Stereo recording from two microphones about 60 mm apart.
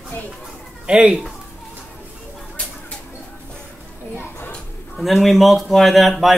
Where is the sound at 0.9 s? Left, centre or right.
Centre.